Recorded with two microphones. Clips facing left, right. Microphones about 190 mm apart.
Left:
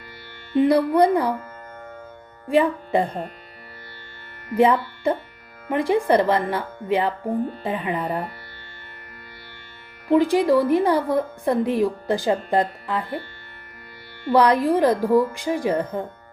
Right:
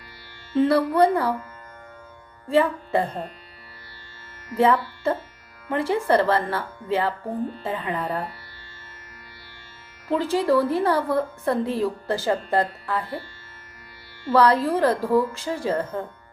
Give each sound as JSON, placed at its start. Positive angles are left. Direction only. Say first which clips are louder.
{"t": 0.5, "sound": "a woman's voice", "louder": "left 2 dB", "side_deg": 15}
{"t": 2.5, "sound": "a woman's voice", "louder": "left 1 dB", "side_deg": 15}
{"t": 4.5, "sound": "a woman's voice", "louder": "left 2 dB", "side_deg": 15}
{"t": 10.1, "sound": "a woman's voice", "louder": "left 4 dB", "side_deg": 15}
{"t": 14.3, "sound": "a woman's voice", "louder": "left 2 dB", "side_deg": 15}